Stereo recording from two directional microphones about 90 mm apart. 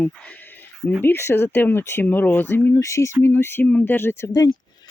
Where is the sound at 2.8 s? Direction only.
35° left (ahead or behind).